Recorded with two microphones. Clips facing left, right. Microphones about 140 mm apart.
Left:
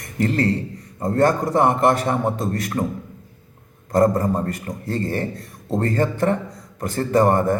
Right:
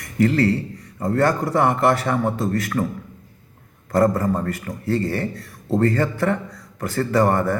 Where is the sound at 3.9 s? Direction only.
20° left (ahead or behind).